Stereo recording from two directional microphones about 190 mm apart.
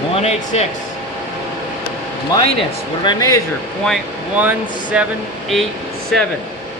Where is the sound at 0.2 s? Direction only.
35° left (ahead or behind).